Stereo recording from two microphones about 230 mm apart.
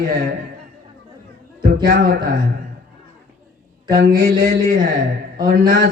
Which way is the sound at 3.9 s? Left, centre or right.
Right.